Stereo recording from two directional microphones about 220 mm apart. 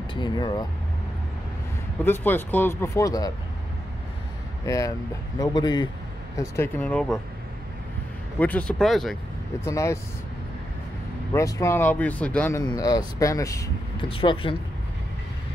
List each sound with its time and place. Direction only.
0.1 s speech: 20° left (ahead or behind)
2.0 s speech: 10° left (ahead or behind)
4.6 s speech: 15° left (ahead or behind)
8.4 s speech: 5° left (ahead or behind)
9.7 s speech: 15° left (ahead or behind)
11.3 s speech: 15° left (ahead or behind)